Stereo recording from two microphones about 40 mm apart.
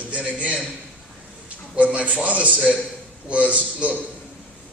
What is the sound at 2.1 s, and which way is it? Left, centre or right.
A man's voice, right.